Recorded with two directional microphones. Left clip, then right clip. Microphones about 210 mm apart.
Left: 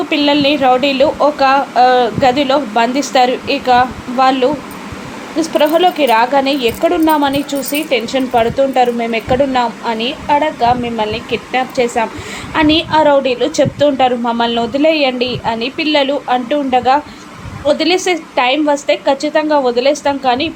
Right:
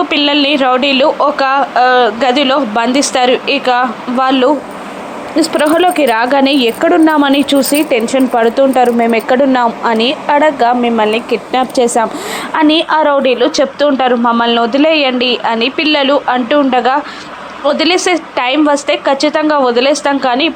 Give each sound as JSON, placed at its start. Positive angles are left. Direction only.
{"t": 0.1, "sound": "speech", "side_deg": -15}
{"t": 5.5, "sound": "speech", "side_deg": -20}
{"t": 11.5, "sound": "speech", "side_deg": -30}